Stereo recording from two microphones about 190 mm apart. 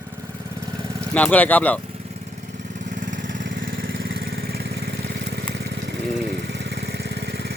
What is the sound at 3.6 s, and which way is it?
Vehicle, 50° right (ahead or behind).